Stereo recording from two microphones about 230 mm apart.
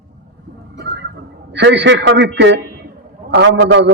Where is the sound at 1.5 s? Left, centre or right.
Right.